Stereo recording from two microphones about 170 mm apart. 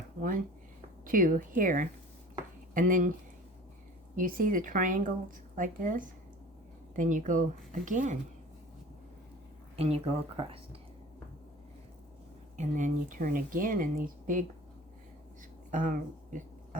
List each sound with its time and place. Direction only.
0.2 s speech: 55° right (ahead or behind)
4.1 s speech: 55° right (ahead or behind)
9.7 s speech: 35° right (ahead or behind)
12.5 s speech: 50° right (ahead or behind)
15.7 s speech: 50° right (ahead or behind)